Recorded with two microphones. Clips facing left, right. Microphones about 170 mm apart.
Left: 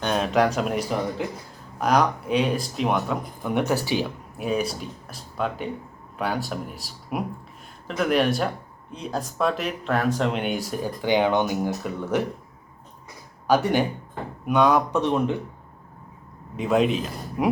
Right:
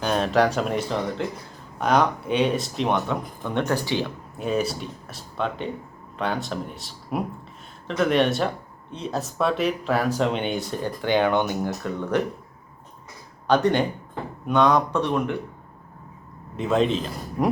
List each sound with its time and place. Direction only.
0.0 s a sound: centre (ahead or behind)
0.3 s speech: centre (ahead or behind)
9.4 s speech: centre (ahead or behind)
13.5 s speech: 5° left (ahead or behind)
14.9 s speech: 15° left (ahead or behind)
16.6 s speech: 5° left (ahead or behind)